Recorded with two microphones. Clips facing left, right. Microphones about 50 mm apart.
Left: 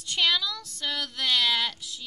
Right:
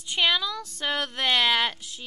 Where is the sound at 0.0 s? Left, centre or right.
Centre.